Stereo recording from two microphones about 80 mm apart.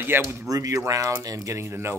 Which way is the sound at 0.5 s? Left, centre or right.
Right.